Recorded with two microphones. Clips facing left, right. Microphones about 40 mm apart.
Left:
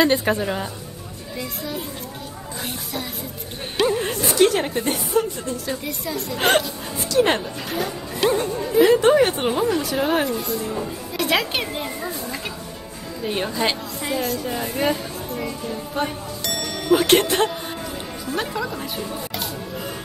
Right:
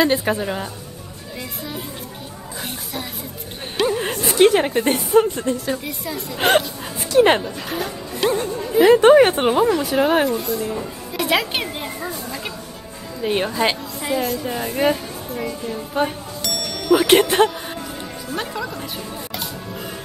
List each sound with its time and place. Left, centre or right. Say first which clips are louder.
0.0 s a woman's voice: even; centre
3.7 s music: even; centre
4.0 s a woman's voice: right 6 dB; centre
4.8 s speech: right 5 dB; right
5.9 s speech: left 1 dB; centre
7.2 s a woman's voice: right 4 dB; centre
7.7 s speech: left 2 dB; centre
8.9 s speech: right 5 dB; right
10.0 s speech: right 3 dB; centre
13.2 s a woman's voice: right 3 dB; centre
18.3 s speech: left 1 dB; centre